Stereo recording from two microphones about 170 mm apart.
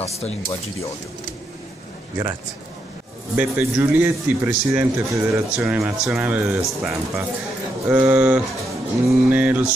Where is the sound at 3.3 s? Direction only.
10° right (ahead or behind).